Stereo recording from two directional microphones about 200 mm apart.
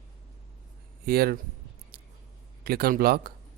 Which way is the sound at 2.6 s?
50° right (ahead or behind).